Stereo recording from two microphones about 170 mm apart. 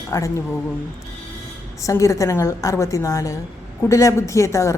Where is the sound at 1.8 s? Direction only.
20° left (ahead or behind).